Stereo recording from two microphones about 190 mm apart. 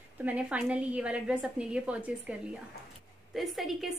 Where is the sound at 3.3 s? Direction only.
Centre (ahead or behind).